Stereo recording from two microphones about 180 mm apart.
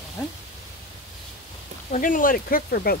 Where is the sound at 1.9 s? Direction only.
45° left (ahead or behind).